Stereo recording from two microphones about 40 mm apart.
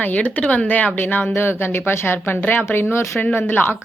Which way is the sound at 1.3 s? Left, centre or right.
Left.